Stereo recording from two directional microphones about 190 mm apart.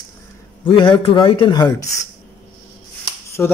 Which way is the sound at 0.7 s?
25° left (ahead or behind).